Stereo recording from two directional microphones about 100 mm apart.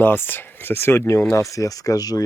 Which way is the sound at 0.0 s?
20° left (ahead or behind).